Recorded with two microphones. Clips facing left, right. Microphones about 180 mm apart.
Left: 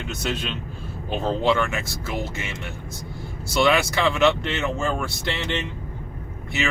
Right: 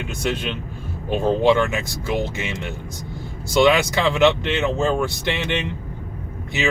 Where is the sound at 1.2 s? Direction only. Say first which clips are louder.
Right 5 dB; 15° right (ahead or behind).